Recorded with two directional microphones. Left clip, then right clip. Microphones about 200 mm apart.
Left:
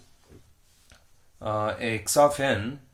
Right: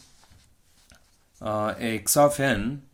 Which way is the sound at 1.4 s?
35° right (ahead or behind).